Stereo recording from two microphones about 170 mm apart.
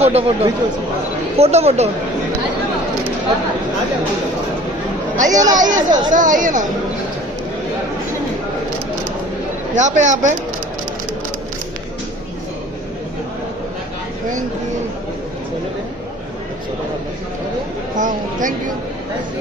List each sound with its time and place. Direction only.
0.0 s speech: 35° right (ahead or behind)
5.1 s speech: 45° right (ahead or behind)
9.8 s speech: 45° right (ahead or behind)
17.9 s speech: 50° right (ahead or behind)